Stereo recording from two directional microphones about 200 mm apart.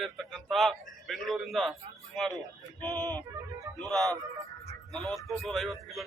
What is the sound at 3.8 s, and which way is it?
Speech, centre (ahead or behind).